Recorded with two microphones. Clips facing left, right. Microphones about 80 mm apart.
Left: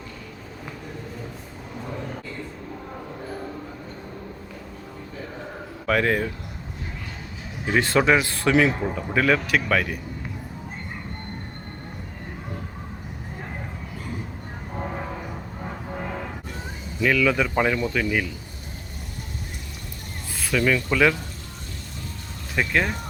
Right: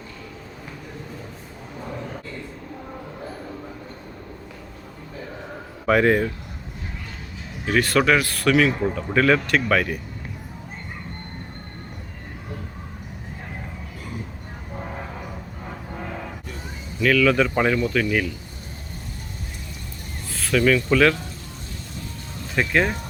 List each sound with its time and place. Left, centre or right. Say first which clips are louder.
5.8 s speech: right 4 dB; centre
7.6 s speech: right 1 dB; left
8.8 s speech: right 3 dB; centre
17.0 s speech: right 3 dB; centre
20.3 s speech: right 3 dB; centre
22.5 s speech: right 2 dB; centre